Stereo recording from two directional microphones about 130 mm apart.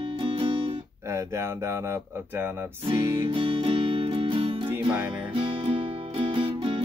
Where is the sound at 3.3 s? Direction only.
45° right (ahead or behind).